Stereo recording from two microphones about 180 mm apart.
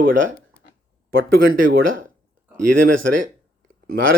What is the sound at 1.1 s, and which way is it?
Speech, 55° right (ahead or behind).